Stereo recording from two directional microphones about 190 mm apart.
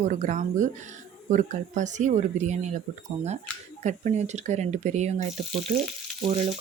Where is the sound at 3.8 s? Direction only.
40° right (ahead or behind).